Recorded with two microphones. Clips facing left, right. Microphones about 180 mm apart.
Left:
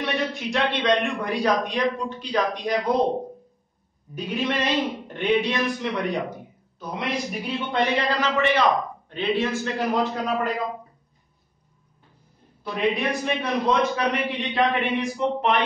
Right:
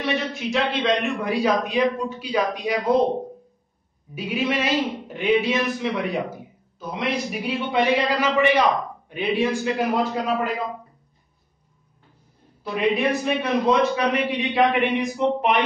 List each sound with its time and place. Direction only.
0.0 s a man's voice: centre (ahead or behind)
4.1 s a man's voice: 10° right (ahead or behind)
12.6 s a man's voice: 5° right (ahead or behind)